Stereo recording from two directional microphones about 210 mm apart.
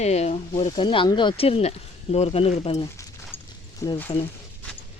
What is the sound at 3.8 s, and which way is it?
Speech, 15° left (ahead or behind).